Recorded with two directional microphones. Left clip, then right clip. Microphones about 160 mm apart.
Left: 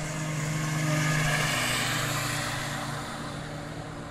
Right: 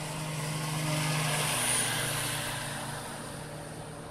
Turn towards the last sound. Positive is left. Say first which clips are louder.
# left 4 dB
turn(degrees=-25)  # may be behind; listen again after turning